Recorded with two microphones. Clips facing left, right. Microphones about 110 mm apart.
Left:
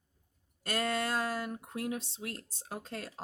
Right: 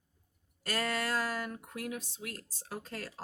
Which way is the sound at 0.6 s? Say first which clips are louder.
Left 1 dB; 25° left (ahead or behind).